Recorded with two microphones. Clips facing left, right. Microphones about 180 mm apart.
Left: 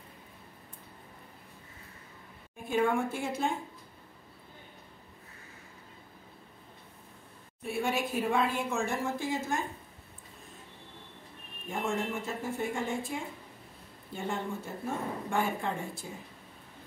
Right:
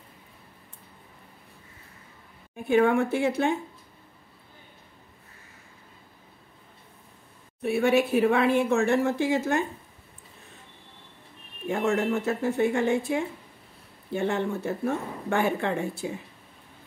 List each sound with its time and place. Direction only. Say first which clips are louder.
2.7 s speech: right 7 dB; 70° right (ahead or behind)
7.6 s speech: right 9 dB; 70° right (ahead or behind)
11.6 s speech: right 8 dB; 75° right (ahead or behind)